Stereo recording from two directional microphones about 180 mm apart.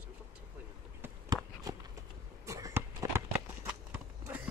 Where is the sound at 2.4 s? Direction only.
15° right (ahead or behind).